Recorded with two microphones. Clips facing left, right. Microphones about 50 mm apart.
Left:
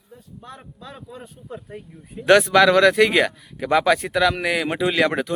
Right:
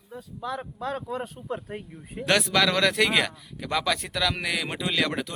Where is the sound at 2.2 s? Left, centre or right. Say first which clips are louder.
Left 9 dB; centre.